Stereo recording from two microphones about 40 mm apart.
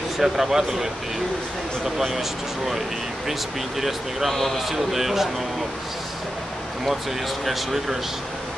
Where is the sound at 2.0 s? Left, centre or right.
Centre.